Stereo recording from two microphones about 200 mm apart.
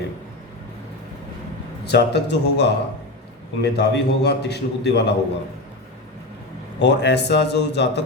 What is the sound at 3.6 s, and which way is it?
A man's voice, 55° left (ahead or behind).